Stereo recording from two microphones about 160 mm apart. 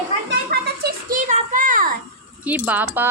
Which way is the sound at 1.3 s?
50° right (ahead or behind).